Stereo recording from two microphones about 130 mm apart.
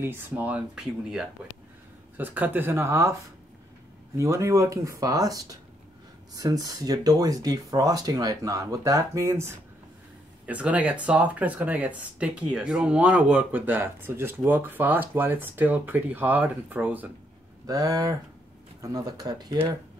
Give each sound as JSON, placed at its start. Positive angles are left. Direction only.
{"t": 0.0, "sound": "speech", "side_deg": -15}
{"t": 4.2, "sound": "speech", "side_deg": -25}
{"t": 10.4, "sound": "speech", "side_deg": -10}
{"t": 17.6, "sound": "speech", "side_deg": -30}